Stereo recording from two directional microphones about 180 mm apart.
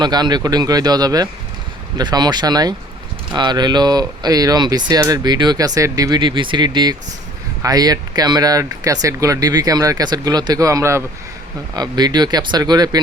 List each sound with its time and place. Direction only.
0.0 s speech: 25° right (ahead or behind)